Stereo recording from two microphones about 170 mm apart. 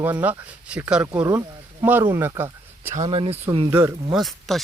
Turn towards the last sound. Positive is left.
turn(degrees=0)  # may be behind; listen again after turning